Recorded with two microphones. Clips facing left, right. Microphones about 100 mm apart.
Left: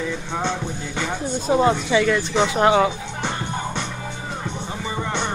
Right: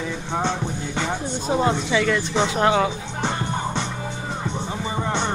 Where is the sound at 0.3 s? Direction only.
25° right (ahead or behind).